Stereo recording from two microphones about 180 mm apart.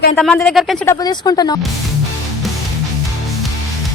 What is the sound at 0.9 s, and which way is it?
Speech, 20° left (ahead or behind).